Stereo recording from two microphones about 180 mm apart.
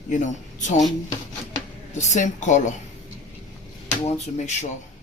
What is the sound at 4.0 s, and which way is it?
Speech, 40° left (ahead or behind).